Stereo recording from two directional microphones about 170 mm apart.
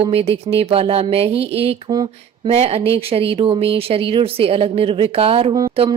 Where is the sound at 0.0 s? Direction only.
35° right (ahead or behind).